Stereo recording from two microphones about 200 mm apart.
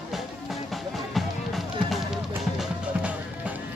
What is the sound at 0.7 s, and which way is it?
Music, centre (ahead or behind).